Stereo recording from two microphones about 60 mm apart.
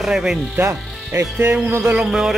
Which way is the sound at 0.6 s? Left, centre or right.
Right.